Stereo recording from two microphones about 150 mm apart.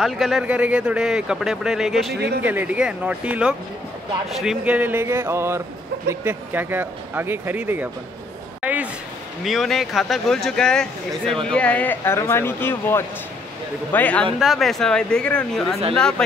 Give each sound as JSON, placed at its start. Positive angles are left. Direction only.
{"t": 0.0, "sound": "speech", "side_deg": 0}
{"t": 2.1, "sound": "a man's voice", "side_deg": -90}
{"t": 2.4, "sound": "speech", "side_deg": -10}
{"t": 8.6, "sound": "a sound", "side_deg": -10}
{"t": 9.4, "sound": "speech", "side_deg": 0}
{"t": 14.4, "sound": "speech", "side_deg": 0}